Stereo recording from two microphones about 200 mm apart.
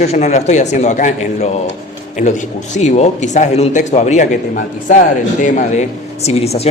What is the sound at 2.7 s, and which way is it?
Speech, 35° left (ahead or behind).